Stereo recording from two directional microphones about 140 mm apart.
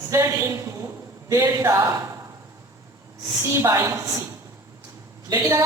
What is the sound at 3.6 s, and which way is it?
Speech, 20° right (ahead or behind).